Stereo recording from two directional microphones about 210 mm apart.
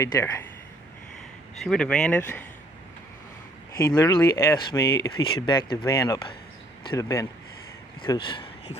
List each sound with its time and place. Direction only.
0.0 s speech: 15° left (ahead or behind)
1.5 s speech: centre (ahead or behind)
3.7 s speech: 15° left (ahead or behind)